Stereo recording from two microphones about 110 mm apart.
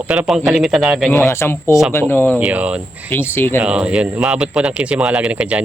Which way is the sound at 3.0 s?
20° left (ahead or behind).